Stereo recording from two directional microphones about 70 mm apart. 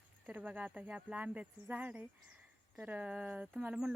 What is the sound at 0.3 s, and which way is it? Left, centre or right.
Speech, right.